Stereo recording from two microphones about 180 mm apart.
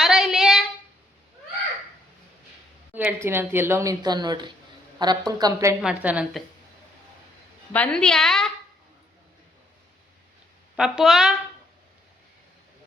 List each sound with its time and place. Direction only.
0.0 s a sound: 5° right (ahead or behind)
2.9 s a woman's voice: 10° right (ahead or behind)
5.8 s a woman's voice: 5° right (ahead or behind)
7.7 s a woman's voice: 5° left (ahead or behind)
10.8 s a woman's voice: 5° right (ahead or behind)